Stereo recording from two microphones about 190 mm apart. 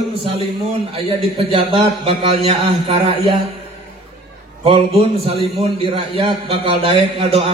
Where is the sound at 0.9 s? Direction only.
30° right (ahead or behind).